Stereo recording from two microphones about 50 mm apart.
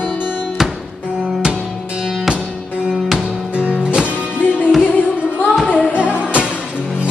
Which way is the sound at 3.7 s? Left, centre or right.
Centre.